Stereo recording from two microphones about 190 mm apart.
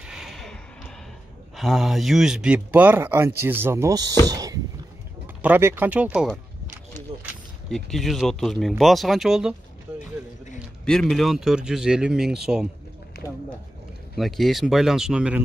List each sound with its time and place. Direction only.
0.0 s a sound: centre (ahead or behind)
1.6 s speech: centre (ahead or behind); by 4.1 s 15° right (ahead or behind)
4.3 s a sound: 20° right (ahead or behind)
5.2 s speech: 10° right (ahead or behind)
10.9 s speech: centre (ahead or behind)
13.2 s speech: 10° right (ahead or behind)
14.1 s speech: centre (ahead or behind)